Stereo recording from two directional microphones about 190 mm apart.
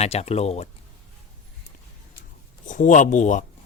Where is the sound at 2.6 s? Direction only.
40° left (ahead or behind).